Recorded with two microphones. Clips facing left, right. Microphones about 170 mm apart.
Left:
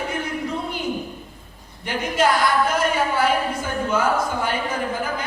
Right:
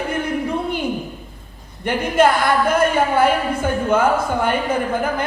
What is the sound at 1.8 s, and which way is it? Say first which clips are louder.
A woman's voice: right 5 dB; 55° right (ahead or behind).